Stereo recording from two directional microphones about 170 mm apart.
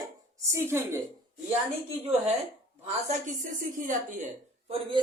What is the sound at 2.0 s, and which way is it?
A woman's voice, 35° right (ahead or behind).